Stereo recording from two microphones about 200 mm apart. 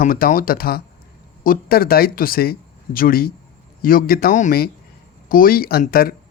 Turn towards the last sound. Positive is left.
turn(degrees=50)  # may be behind; listen again after turning